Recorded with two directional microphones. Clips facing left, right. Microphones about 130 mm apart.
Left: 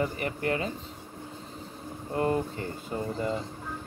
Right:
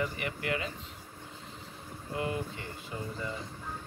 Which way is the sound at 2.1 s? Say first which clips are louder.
Left 7 dB; 40° left (ahead or behind).